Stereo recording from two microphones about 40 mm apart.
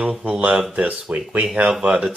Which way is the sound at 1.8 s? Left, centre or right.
Right.